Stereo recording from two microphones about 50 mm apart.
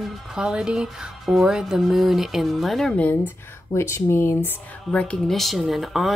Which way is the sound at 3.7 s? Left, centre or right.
Left.